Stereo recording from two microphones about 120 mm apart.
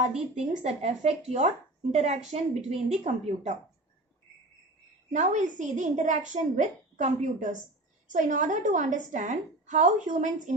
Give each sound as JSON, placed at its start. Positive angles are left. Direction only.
{"t": 0.3, "sound": "speech", "side_deg": -60}
{"t": 3.0, "sound": "a woman's voice", "side_deg": -70}
{"t": 5.1, "sound": "a woman's voice", "side_deg": -90}